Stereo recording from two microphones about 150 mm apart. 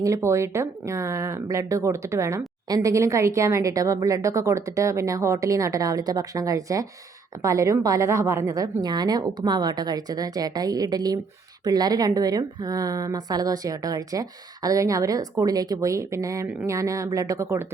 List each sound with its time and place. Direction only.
0.0 s a woman's voice: 20° right (ahead or behind)